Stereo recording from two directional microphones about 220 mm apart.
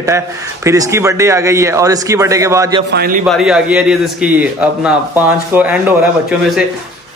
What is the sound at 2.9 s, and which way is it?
Speech, 45° right (ahead or behind).